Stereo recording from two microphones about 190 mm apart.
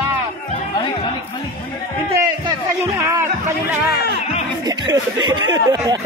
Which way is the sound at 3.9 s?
60° left (ahead or behind).